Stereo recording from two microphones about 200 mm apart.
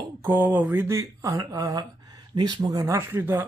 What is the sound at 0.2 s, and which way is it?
Speech, 10° right (ahead or behind).